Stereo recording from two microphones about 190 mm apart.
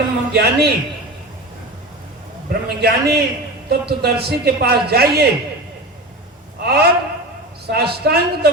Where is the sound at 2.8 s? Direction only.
60° right (ahead or behind).